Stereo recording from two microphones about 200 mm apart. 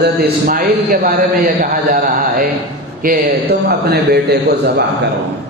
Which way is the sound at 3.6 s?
55° right (ahead or behind).